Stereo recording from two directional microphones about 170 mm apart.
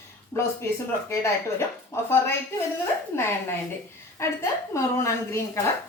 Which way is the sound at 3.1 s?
15° left (ahead or behind).